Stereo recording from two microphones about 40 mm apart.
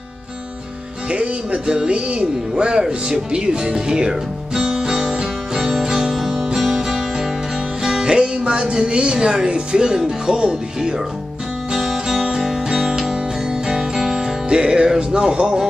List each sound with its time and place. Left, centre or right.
1.1 s speech: right
2.8 s music: right; by 6.7 s centre
7.8 s speech: centre
11.7 s music: centre